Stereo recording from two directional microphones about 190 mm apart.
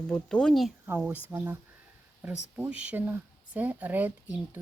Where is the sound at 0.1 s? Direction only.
5° left (ahead or behind).